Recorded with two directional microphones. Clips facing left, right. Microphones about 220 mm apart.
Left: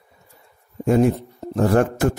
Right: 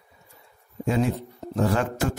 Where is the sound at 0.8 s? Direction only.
50° left (ahead or behind).